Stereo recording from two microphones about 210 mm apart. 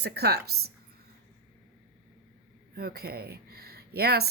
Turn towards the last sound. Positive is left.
turn(degrees=-50)  # may be behind; listen again after turning